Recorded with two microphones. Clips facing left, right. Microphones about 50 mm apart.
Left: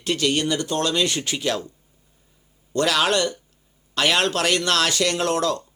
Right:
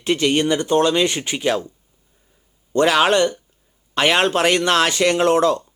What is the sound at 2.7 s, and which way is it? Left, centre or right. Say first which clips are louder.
Speech: right 5 dB; right.